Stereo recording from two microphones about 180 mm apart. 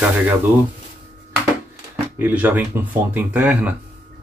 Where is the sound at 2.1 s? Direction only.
10° right (ahead or behind).